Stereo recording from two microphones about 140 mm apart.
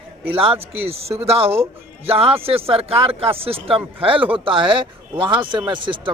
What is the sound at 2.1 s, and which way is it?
Speech, 40° right (ahead or behind).